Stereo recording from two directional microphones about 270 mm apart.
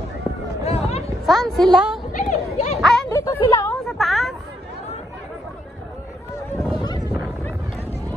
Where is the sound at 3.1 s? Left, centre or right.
Centre.